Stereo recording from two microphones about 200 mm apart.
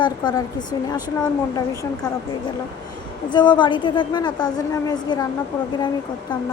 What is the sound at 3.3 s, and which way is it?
A woman's voice, 20° left (ahead or behind).